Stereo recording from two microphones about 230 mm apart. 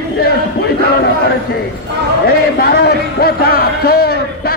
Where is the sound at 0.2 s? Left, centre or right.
Left.